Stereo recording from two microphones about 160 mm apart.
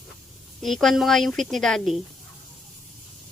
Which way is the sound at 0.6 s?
Centre (ahead or behind).